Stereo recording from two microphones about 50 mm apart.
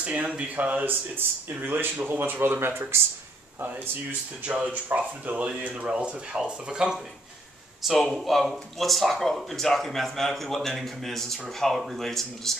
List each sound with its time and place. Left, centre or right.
0.0 s speech: right
4.5 s speech: right
7.8 s speech: centre